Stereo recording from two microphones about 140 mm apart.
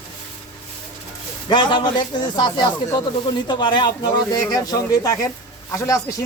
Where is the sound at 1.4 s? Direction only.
30° left (ahead or behind).